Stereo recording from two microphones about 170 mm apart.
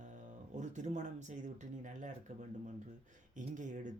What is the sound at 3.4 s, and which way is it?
Speech, 45° right (ahead or behind).